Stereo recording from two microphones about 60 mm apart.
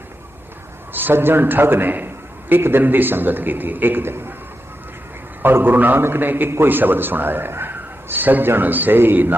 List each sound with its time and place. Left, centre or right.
0.9 s a man's voice: right
5.4 s a man's voice: right